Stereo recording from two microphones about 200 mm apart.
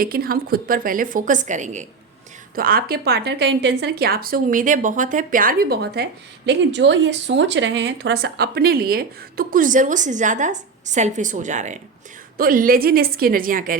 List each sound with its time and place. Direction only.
0.0 s a woman's voice: 50° right (ahead or behind)